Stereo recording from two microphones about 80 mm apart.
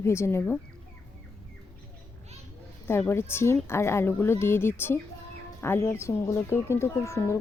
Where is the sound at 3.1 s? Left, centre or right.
Left.